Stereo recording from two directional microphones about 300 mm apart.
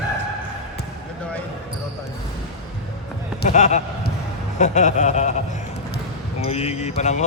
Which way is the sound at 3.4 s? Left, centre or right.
Left.